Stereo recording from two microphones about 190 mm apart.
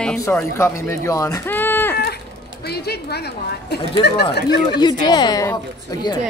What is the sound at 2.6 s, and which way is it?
Speech, 55° left (ahead or behind).